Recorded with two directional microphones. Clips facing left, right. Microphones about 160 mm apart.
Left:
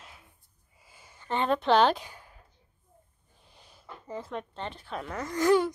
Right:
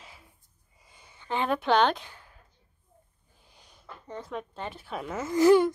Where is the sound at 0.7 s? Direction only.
5° left (ahead or behind).